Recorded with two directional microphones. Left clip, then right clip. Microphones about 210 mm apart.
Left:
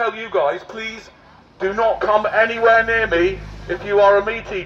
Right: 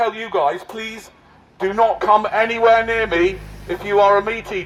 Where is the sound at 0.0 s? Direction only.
45° right (ahead or behind).